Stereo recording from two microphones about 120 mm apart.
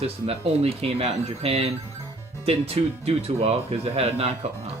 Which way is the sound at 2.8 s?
50° right (ahead or behind).